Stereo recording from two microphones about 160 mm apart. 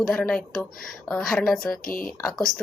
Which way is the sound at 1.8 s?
65° left (ahead or behind).